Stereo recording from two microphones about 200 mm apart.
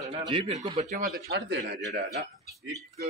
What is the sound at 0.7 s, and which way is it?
Speech, 35° right (ahead or behind).